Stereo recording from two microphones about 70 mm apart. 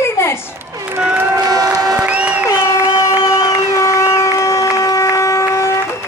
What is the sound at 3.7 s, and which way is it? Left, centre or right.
Vehicle, left.